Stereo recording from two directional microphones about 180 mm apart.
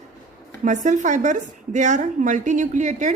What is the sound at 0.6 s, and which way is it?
A woman's voice, 45° right (ahead or behind).